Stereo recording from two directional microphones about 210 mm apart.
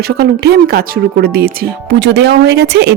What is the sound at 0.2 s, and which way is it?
Speech, 50° right (ahead or behind).